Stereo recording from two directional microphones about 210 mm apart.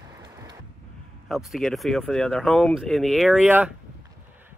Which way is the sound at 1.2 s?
Centre (ahead or behind).